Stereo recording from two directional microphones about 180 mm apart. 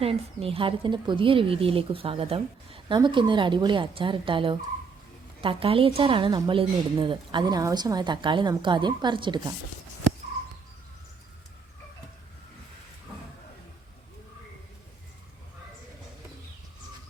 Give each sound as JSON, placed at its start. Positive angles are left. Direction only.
{"t": 0.0, "sound": "a woman's voice", "side_deg": -30}